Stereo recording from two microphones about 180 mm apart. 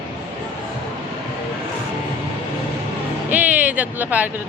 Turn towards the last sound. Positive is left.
turn(degrees=-10)  # may be behind; listen again after turning